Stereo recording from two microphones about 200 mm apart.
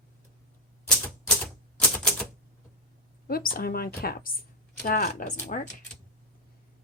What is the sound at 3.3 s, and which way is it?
Speech, 45° left (ahead or behind).